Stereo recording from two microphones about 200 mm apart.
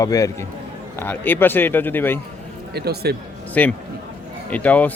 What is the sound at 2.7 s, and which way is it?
Speech, 55° right (ahead or behind).